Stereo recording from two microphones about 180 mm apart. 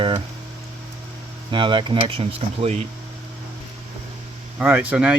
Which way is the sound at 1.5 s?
25° right (ahead or behind).